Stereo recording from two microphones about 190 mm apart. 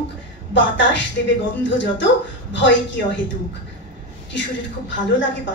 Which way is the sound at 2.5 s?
75° left (ahead or behind).